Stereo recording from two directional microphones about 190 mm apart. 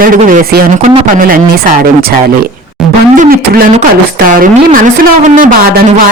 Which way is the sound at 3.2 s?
50° right (ahead or behind).